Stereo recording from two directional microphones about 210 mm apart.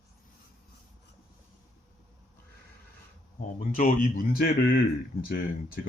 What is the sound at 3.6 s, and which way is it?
Speech, 40° left (ahead or behind).